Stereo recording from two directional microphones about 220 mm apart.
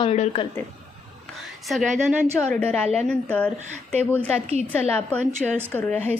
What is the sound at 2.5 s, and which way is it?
A woman's voice, 5° left (ahead or behind).